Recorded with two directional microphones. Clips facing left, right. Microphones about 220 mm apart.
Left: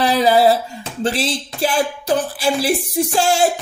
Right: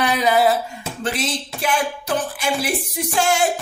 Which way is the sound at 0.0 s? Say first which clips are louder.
Left 4 dB; 35° left (ahead or behind).